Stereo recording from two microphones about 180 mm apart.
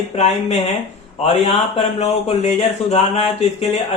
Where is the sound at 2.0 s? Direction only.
35° left (ahead or behind).